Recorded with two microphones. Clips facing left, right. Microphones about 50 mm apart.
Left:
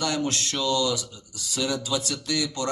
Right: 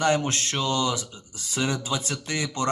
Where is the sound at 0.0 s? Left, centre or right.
Right.